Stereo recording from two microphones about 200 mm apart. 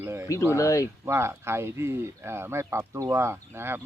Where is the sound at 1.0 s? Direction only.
15° right (ahead or behind).